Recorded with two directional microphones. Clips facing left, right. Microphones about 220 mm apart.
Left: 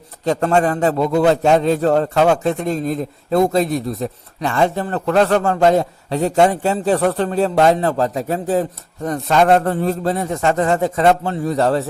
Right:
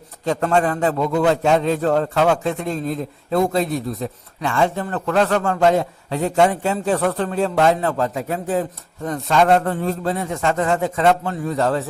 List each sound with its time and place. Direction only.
0.3 s a man's voice: 40° left (ahead or behind)